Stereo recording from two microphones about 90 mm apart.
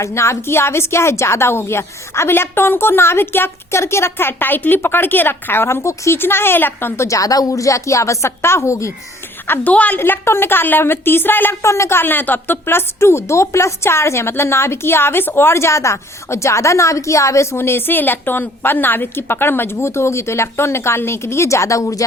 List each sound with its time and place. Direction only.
0.0 s a woman's voice: 30° left (ahead or behind)
9.5 s a woman's voice: 20° left (ahead or behind); by 22.0 s 35° left (ahead or behind)